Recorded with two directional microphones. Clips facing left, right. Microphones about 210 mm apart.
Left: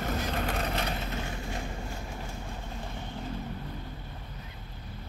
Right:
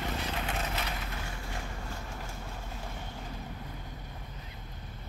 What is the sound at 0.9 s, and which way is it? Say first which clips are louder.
Vehicle: left 5 dB; 25° left (ahead or behind).